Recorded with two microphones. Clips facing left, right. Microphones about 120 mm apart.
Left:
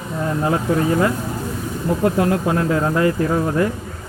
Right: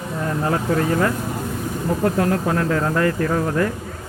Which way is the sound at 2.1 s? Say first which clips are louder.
Left 2 dB; 10° left (ahead or behind).